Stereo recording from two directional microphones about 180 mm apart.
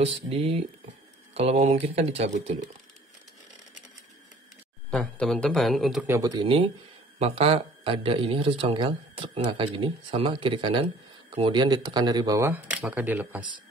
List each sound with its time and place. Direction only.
0.0 s speech: 35° right (ahead or behind)
4.9 s a man's voice: 5° left (ahead or behind)
6.0 s speech: 15° right (ahead or behind)
7.2 s speech: 30° right (ahead or behind); by 13.5 s 10° right (ahead or behind)